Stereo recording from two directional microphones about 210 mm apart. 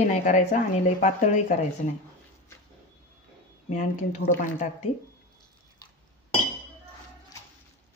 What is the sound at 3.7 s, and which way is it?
Speech, 35° left (ahead or behind).